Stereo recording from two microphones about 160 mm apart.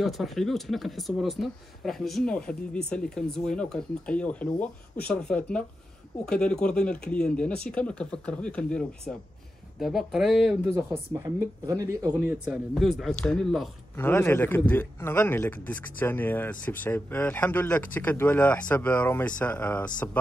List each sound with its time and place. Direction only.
0.0 s speech: centre (ahead or behind)
10.7 s speech: 15° right (ahead or behind)
12.4 s speech: centre (ahead or behind)
13.9 s speech: 15° left (ahead or behind)